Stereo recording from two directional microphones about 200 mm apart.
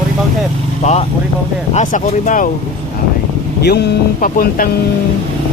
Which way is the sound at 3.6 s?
55° left (ahead or behind).